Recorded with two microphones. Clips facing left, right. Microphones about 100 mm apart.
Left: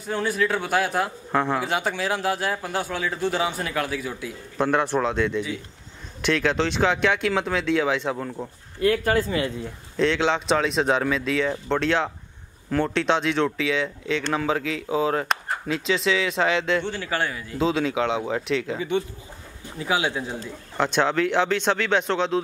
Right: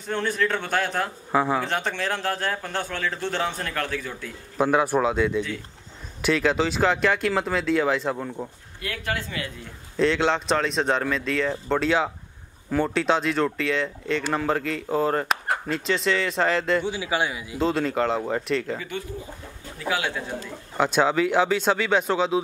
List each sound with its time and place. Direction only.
0.0 s speech: 5° left (ahead or behind)
1.3 s speech: 5° right (ahead or behind)
1.6 s speech: 5° left (ahead or behind)
4.6 s speech: 5° right (ahead or behind)
8.8 s speech: 35° left (ahead or behind)
9.9 s speech: centre (ahead or behind)
17.6 s speech: centre (ahead or behind)
18.8 s speech: 20° left (ahead or behind)
20.7 s speech: 5° right (ahead or behind)